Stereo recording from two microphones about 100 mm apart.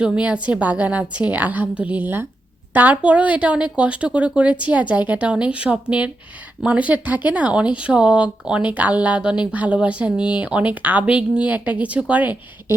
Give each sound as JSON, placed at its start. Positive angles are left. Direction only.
{"t": 0.0, "sound": "speech", "side_deg": -10}